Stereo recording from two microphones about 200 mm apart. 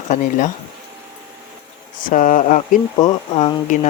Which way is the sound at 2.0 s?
40° left (ahead or behind).